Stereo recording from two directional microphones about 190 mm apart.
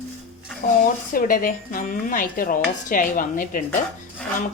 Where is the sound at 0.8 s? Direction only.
45° left (ahead or behind).